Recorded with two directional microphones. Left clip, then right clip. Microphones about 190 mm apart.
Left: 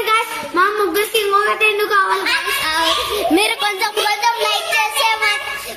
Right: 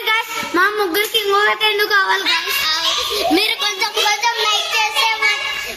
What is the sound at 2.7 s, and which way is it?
Baby laughter, 40° left (ahead or behind).